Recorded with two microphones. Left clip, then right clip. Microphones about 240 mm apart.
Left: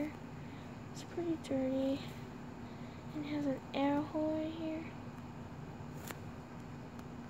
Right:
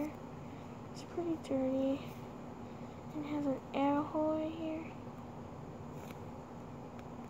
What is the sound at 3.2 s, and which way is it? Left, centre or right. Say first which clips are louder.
Speech: right 1 dB; centre.